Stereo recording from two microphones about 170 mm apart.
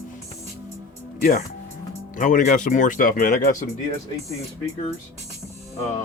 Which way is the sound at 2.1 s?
50° left (ahead or behind).